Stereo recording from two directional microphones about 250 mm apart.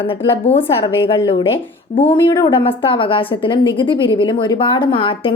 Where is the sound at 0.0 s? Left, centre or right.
Left.